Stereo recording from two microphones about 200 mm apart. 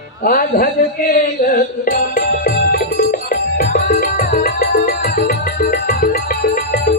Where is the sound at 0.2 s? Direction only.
45° left (ahead or behind).